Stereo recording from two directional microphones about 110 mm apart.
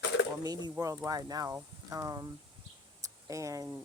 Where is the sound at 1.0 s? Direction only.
35° right (ahead or behind).